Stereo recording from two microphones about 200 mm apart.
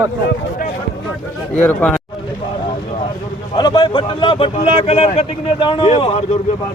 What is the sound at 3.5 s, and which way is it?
A man's voice, 20° left (ahead or behind).